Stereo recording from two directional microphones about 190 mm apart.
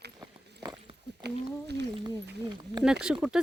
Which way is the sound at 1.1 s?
60° right (ahead or behind).